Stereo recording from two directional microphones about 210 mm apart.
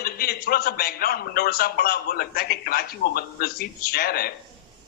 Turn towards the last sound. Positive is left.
turn(degrees=45)  # may be behind; listen again after turning